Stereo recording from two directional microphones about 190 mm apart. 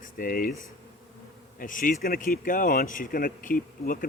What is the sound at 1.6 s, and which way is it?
Speech, 45° left (ahead or behind).